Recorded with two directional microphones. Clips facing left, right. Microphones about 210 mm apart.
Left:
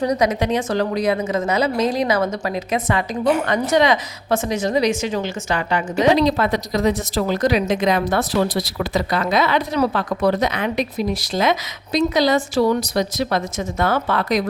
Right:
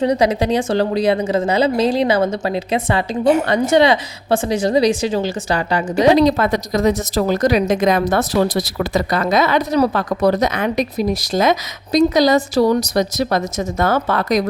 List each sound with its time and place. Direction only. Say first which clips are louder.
0.0 s a woman's voice: right 3 dB; 30° right (ahead or behind)